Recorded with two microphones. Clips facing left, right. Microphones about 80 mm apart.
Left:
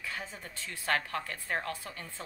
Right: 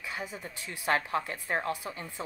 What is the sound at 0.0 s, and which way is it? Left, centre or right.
A woman's voice, centre.